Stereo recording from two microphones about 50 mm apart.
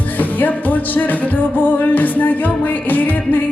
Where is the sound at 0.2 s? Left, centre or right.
Left.